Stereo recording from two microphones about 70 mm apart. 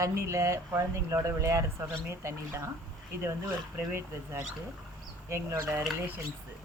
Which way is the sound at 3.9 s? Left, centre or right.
Right.